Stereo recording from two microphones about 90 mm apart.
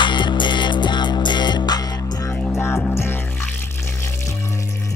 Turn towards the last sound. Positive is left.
turn(degrees=25)  # may be behind; listen again after turning